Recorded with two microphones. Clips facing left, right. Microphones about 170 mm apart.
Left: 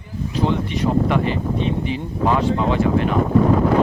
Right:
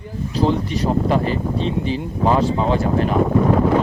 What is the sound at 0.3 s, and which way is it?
Speech, 35° right (ahead or behind).